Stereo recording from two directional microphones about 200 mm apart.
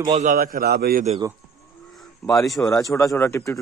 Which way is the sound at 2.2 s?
Centre (ahead or behind).